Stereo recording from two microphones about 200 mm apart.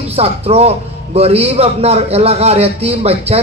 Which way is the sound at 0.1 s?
30° right (ahead or behind).